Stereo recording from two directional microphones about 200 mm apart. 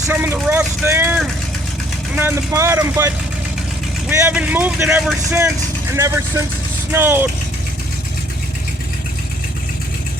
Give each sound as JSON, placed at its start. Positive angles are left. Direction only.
{"t": 0.1, "sound": "speech", "side_deg": -10}
{"t": 4.1, "sound": "speech", "side_deg": -10}